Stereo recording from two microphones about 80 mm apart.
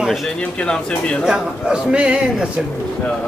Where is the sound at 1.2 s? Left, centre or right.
Centre.